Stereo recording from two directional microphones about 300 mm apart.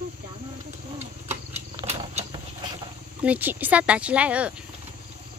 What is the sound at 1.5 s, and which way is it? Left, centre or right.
Wild animals, right.